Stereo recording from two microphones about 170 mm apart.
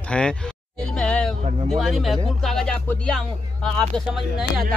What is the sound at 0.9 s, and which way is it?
Music, 5° left (ahead or behind).